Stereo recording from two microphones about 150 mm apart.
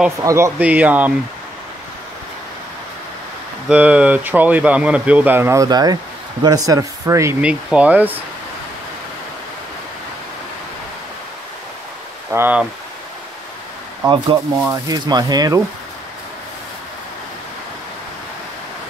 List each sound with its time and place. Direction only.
0.2 s speech: 20° right (ahead or behind)
0.6 s speech: 10° right (ahead or behind)
3.6 s speech: 10° right (ahead or behind)
7.4 s speech: 10° right (ahead or behind)
12.3 s speech: 15° right (ahead or behind)
14.6 s speech: 25° right (ahead or behind)